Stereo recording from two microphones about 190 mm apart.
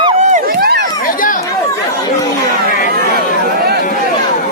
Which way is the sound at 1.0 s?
45° left (ahead or behind).